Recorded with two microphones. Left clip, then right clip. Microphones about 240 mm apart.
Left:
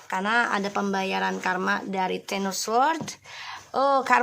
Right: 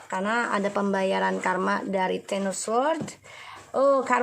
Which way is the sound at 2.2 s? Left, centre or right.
Left.